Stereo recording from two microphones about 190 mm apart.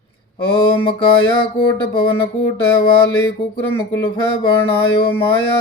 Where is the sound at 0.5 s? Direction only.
25° left (ahead or behind).